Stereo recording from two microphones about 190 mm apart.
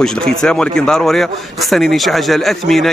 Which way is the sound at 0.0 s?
5° left (ahead or behind).